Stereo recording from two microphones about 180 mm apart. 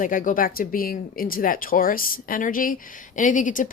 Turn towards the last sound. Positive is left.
turn(degrees=45)  # may be behind; listen again after turning